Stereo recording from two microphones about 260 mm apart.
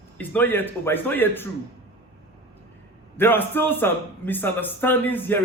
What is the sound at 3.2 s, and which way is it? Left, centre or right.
A man's voice, centre.